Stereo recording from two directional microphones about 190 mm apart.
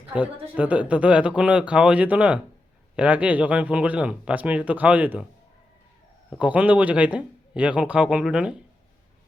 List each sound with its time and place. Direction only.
0.1 s speech: 5° right (ahead or behind)
6.4 s speech: 5° right (ahead or behind)